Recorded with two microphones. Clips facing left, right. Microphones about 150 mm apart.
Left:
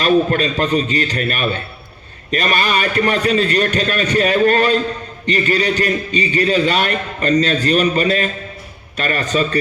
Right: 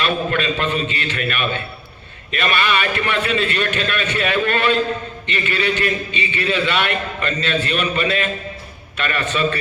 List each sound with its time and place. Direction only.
0.0 s a man's voice: 40° left (ahead or behind)